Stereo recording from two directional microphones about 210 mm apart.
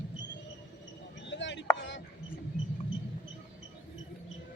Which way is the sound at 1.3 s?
60° left (ahead or behind).